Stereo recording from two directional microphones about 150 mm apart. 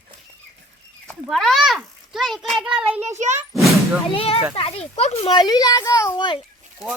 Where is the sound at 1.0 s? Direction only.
Centre (ahead or behind).